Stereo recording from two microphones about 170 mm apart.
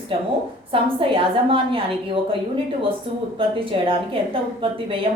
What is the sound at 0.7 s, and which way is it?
A woman's voice, 30° right (ahead or behind).